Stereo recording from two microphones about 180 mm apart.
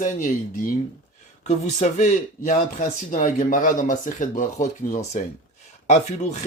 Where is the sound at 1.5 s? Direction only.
40° left (ahead or behind).